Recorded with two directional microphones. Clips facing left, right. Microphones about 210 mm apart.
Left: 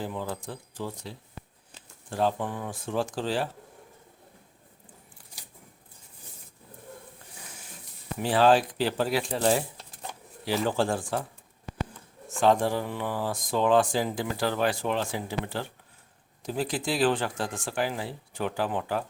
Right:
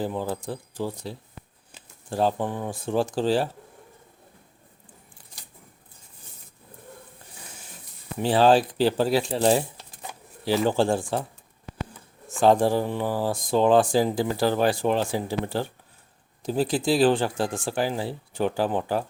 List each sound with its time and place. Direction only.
0.0 s speech: 35° right (ahead or behind)
8.2 s speech: 30° right (ahead or behind)
9.7 s a sound: 5° right (ahead or behind)
10.6 s speech: 25° right (ahead or behind)
12.4 s speech: 35° right (ahead or behind)